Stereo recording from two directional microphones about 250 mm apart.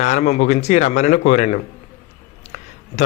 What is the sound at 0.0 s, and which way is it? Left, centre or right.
A man's voice, left.